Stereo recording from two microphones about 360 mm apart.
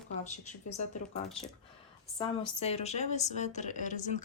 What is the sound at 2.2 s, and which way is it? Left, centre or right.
A woman's voice, centre.